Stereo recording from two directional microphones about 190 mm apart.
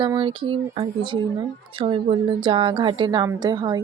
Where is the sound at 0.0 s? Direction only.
25° right (ahead or behind).